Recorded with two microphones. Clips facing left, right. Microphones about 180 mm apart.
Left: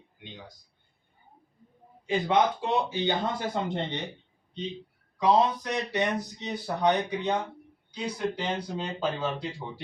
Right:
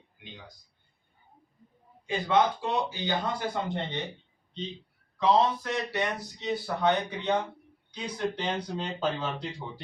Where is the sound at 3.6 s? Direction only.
20° left (ahead or behind).